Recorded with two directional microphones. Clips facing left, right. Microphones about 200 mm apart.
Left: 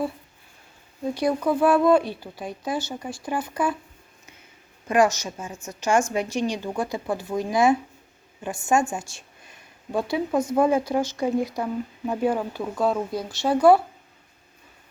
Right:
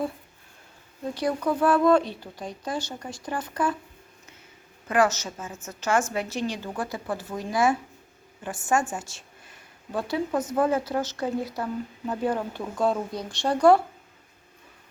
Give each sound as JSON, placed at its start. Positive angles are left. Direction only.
{"t": 1.1, "sound": "a woman's voice", "side_deg": 10}
{"t": 4.9, "sound": "a woman's voice", "side_deg": 15}